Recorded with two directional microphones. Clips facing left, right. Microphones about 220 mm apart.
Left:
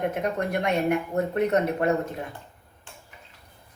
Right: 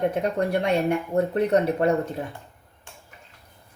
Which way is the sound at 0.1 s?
30° right (ahead or behind).